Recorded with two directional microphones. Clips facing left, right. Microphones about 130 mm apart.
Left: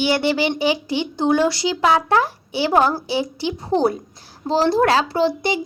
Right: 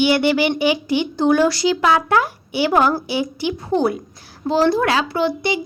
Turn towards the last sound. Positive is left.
turn(degrees=40)  # may be behind; listen again after turning